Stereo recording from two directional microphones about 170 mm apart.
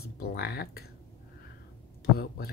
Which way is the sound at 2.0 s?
70° left (ahead or behind).